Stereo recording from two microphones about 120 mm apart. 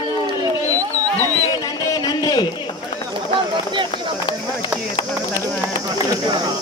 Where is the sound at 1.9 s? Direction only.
35° left (ahead or behind).